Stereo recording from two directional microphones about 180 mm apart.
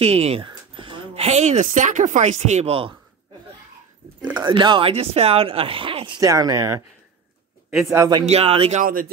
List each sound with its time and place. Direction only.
0.0 s speech: 35° right (ahead or behind)
4.4 s speech: 25° right (ahead or behind)
7.9 s speech: 20° right (ahead or behind)
8.3 s speech: 35° right (ahead or behind)